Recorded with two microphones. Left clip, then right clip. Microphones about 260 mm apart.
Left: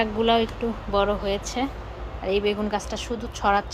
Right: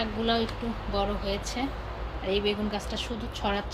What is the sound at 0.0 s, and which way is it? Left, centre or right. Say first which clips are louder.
Speech: left 7 dB; left.